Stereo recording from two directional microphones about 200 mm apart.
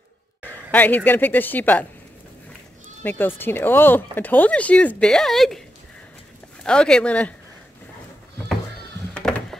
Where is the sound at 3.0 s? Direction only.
10° left (ahead or behind).